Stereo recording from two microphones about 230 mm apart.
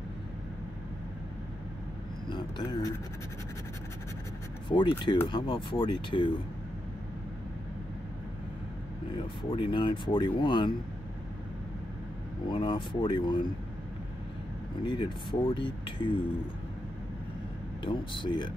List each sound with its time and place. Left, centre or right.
2.2 s speech: centre
4.6 s speech: left
9.5 s speech: left
12.4 s speech: left
14.9 s speech: centre
17.8 s speech: left